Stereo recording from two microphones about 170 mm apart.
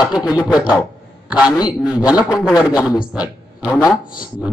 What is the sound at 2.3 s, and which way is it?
Speech, 20° left (ahead or behind).